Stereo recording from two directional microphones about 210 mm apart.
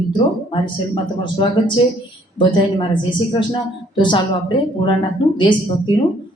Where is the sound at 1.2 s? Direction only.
20° left (ahead or behind).